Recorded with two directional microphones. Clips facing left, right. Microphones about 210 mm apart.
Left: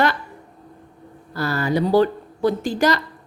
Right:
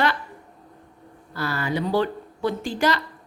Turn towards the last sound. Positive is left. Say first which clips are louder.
# left 4 dB
turn(degrees=40)  # may be behind; listen again after turning